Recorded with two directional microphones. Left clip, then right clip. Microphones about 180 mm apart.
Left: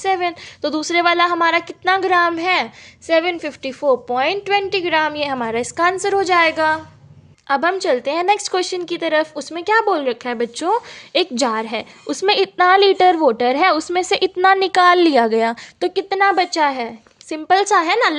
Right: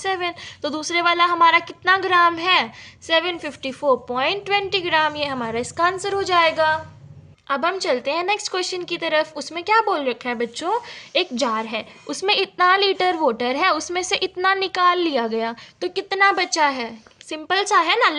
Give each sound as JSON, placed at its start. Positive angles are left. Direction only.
{"t": 0.0, "sound": "a woman's voice", "side_deg": 35}